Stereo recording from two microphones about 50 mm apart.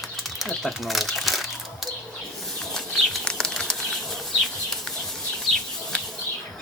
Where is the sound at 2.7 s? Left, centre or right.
Centre.